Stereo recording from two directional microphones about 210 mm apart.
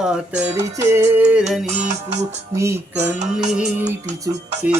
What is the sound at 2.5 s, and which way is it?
Music, 15° right (ahead or behind).